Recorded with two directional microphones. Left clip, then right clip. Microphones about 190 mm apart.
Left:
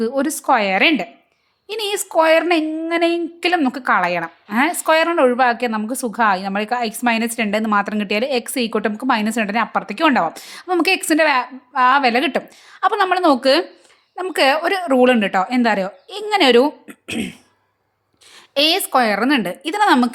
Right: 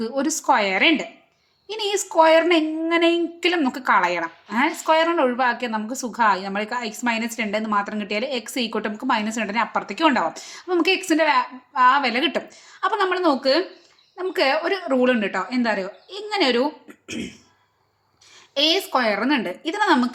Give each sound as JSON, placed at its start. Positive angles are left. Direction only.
{"t": 0.0, "sound": "a woman's voice", "side_deg": 25}
{"t": 18.3, "sound": "a woman's voice", "side_deg": 40}